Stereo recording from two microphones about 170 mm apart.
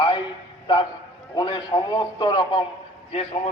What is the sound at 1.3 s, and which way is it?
A man's voice, 25° left (ahead or behind).